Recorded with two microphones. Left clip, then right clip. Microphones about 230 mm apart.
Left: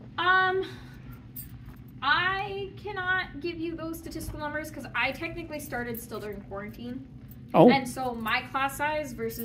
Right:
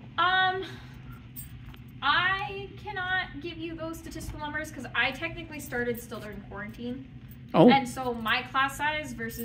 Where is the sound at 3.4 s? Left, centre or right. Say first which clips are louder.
Left 3 dB; centre.